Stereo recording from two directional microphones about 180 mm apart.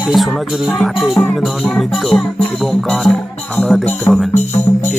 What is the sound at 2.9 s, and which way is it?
Music, 5° left (ahead or behind).